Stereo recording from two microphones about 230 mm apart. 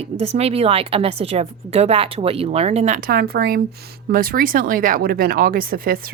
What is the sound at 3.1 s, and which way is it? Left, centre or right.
Speech, right.